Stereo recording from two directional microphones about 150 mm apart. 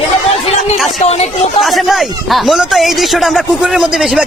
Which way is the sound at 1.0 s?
45° left (ahead or behind).